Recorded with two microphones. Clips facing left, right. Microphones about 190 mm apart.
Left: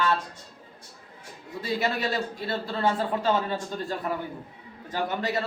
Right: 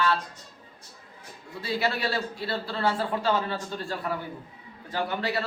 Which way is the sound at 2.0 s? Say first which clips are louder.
Left 1 dB; 20° left (ahead or behind).